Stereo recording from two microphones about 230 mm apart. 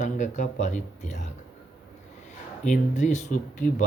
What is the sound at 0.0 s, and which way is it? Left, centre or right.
Speech, left.